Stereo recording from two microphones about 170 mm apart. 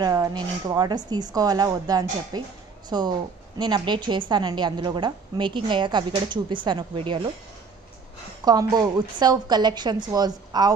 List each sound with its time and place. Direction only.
0.0 s a woman's voice: 20° right (ahead or behind)
8.5 s a woman's voice: 20° right (ahead or behind)